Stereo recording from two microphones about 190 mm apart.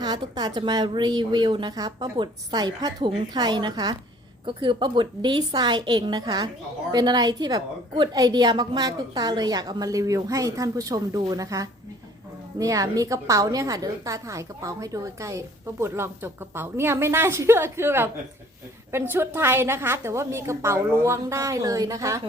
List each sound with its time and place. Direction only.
0.0 s a woman's voice: 20° right (ahead or behind)